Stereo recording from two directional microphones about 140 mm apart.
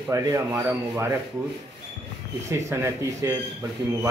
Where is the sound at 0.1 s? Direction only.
20° right (ahead or behind).